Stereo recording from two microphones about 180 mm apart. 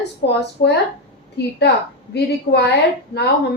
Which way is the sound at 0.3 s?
70° left (ahead or behind).